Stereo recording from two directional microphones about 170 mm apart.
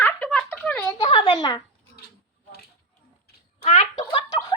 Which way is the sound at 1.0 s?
35° left (ahead or behind).